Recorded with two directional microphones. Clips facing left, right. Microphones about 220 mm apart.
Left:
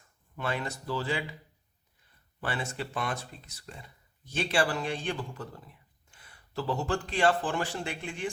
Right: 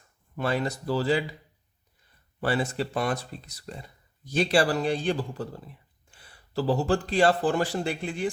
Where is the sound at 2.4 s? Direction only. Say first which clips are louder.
Right 8 dB; 35° right (ahead or behind).